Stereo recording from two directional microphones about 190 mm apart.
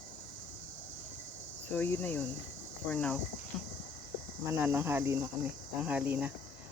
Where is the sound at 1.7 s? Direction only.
10° left (ahead or behind).